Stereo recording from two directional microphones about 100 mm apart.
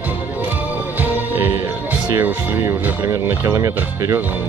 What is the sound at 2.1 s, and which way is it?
Speech, 25° right (ahead or behind).